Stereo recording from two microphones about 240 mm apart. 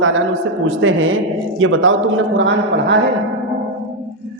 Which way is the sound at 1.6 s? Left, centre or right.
Right.